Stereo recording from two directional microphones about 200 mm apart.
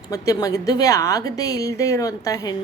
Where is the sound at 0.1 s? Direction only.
15° left (ahead or behind).